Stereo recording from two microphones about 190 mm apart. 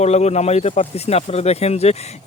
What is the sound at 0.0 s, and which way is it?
Speech, 35° left (ahead or behind).